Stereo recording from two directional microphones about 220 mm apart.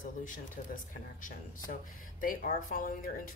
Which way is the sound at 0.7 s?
35° left (ahead or behind).